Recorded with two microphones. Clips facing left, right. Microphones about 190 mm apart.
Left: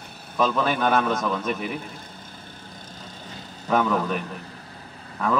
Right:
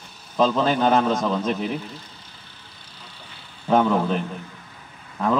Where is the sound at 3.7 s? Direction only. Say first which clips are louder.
Right 3 dB; 25° right (ahead or behind).